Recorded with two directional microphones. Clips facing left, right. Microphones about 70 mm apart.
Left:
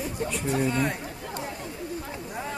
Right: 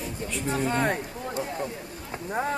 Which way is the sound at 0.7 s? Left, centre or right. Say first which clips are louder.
Right 2 dB; right.